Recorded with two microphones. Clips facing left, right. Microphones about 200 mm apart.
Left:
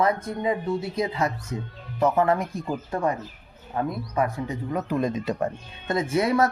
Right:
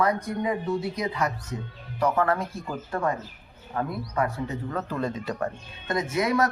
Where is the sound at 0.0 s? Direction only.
25° left (ahead or behind).